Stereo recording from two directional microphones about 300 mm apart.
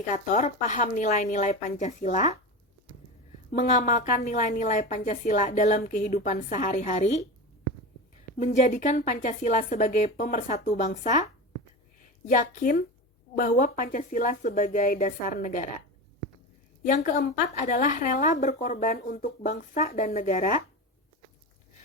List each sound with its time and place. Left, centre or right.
0.1 s a woman's voice: left
3.5 s a woman's voice: left
8.4 s a woman's voice: left
12.3 s a woman's voice: left
16.8 s a woman's voice: left